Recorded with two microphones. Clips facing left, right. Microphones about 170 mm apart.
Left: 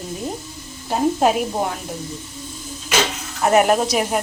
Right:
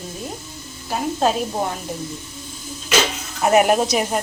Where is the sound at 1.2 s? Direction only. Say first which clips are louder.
Left 1 dB; 15° left (ahead or behind).